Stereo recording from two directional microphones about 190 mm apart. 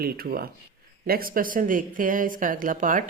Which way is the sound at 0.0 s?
50° right (ahead or behind).